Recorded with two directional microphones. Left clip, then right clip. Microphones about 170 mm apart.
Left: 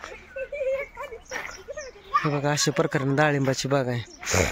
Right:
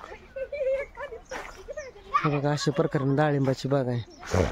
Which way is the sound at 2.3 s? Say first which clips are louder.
Left 2 dB; 15° right (ahead or behind).